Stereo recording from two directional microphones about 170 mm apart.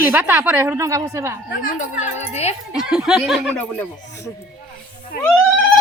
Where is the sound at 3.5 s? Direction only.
10° left (ahead or behind).